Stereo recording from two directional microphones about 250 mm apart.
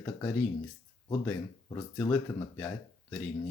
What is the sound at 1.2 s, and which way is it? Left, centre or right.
Speech, centre.